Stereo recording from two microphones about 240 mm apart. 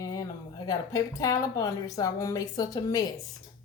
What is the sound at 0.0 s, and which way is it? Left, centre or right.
Speech, centre.